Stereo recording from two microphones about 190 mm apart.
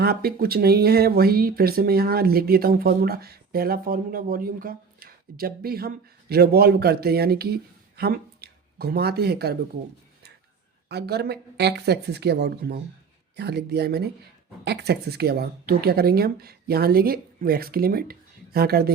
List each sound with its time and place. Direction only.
0.0 s speech: 55° right (ahead or behind)
10.8 s speech: 60° right (ahead or behind)